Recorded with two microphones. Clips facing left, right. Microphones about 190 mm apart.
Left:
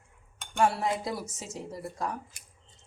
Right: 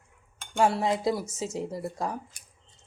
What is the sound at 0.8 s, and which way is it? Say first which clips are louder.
Speech: right 5 dB; 25° right (ahead or behind).